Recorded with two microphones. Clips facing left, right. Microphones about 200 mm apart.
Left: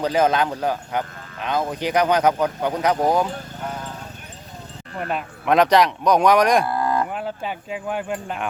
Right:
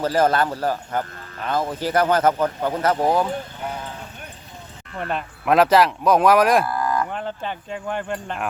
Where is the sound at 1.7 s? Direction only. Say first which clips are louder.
Even; 15° left (ahead or behind).